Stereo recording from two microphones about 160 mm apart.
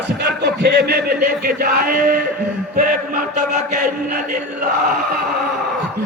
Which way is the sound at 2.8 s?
60° right (ahead or behind).